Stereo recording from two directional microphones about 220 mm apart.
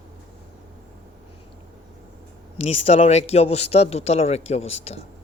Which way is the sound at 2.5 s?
30° left (ahead or behind).